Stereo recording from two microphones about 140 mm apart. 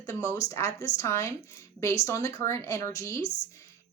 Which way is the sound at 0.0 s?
25° left (ahead or behind).